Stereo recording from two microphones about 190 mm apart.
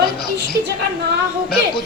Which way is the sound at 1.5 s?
55° left (ahead or behind).